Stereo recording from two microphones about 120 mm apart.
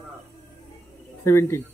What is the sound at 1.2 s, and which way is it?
Speech, 20° left (ahead or behind).